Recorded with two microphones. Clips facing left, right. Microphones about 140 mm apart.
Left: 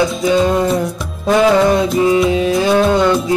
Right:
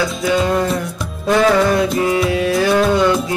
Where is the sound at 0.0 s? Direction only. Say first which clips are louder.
Left 4 dB; 20° left (ahead or behind).